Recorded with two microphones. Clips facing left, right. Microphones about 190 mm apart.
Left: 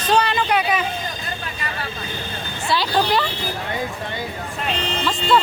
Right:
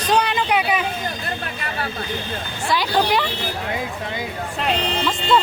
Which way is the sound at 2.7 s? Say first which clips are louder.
Even; 15° right (ahead or behind).